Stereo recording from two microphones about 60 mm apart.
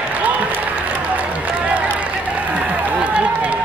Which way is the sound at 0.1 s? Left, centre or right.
Right.